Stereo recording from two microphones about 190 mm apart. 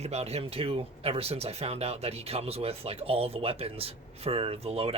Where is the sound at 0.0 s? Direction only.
35° right (ahead or behind).